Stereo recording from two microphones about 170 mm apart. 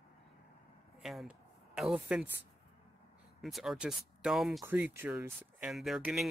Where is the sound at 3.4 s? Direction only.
Centre (ahead or behind).